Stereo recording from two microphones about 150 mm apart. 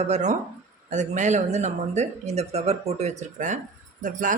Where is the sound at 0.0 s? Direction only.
50° right (ahead or behind).